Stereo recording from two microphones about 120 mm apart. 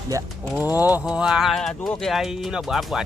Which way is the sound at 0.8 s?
15° right (ahead or behind).